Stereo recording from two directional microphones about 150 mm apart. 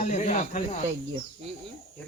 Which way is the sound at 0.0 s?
55° left (ahead or behind).